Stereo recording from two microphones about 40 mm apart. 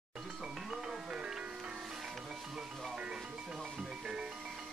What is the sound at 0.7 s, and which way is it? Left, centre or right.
Music, centre.